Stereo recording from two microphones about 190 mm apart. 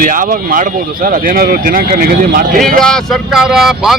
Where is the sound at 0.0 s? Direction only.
45° right (ahead or behind).